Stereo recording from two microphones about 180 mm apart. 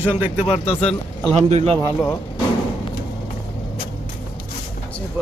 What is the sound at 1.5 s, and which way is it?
Speech, 35° right (ahead or behind).